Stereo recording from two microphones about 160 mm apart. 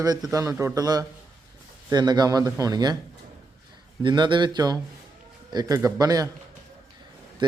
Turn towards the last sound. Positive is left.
turn(degrees=-25)  # may be behind; listen again after turning